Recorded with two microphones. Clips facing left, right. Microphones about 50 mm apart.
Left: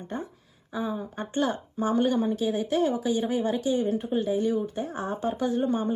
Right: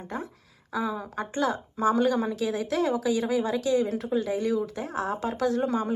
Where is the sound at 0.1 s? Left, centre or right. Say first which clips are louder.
Even; right.